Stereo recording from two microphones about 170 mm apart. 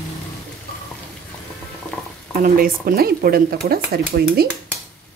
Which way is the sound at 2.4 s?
55° right (ahead or behind).